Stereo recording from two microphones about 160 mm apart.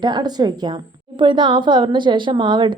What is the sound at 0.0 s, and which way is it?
A woman's voice, 25° right (ahead or behind).